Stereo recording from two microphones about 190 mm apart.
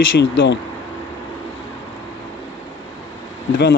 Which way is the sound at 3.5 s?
60° left (ahead or behind).